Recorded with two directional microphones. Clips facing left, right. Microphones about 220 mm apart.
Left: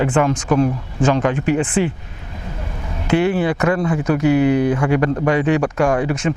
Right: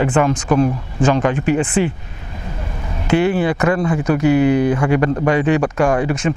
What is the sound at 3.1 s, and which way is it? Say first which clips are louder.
Speech: right 1 dB; 10° right (ahead or behind).